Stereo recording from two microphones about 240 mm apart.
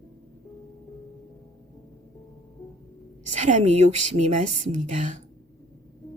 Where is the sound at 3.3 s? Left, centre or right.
Right.